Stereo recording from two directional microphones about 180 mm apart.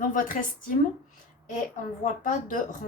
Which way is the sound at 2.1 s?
45° left (ahead or behind).